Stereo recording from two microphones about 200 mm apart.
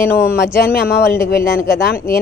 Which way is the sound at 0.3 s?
50° left (ahead or behind).